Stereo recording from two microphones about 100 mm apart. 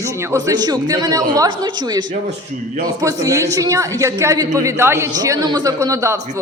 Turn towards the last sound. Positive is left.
turn(degrees=-30)  # may be behind; listen again after turning